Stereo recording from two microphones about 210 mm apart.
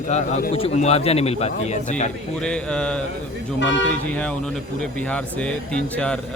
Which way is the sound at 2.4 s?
5° left (ahead or behind).